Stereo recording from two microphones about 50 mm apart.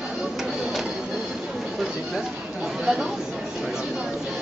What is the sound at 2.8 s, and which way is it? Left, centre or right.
Speech, centre.